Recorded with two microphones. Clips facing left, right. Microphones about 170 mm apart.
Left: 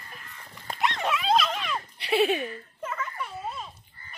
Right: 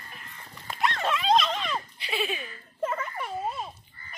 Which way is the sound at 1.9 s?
70° left (ahead or behind).